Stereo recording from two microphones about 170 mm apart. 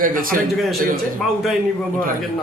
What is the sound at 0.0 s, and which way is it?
Speech, 55° right (ahead or behind).